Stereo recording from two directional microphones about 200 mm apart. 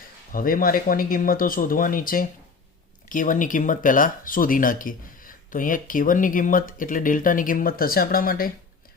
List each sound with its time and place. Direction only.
0.3 s speech: 45° left (ahead or behind)